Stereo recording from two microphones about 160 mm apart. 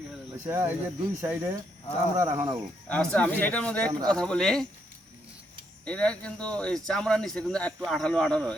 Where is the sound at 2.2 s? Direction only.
20° right (ahead or behind).